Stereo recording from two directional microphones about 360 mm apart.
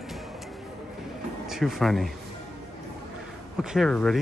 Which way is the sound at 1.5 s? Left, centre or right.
Centre.